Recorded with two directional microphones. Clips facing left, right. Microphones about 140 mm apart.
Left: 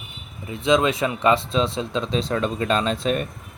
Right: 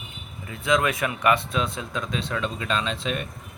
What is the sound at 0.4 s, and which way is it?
Speech, 20° left (ahead or behind).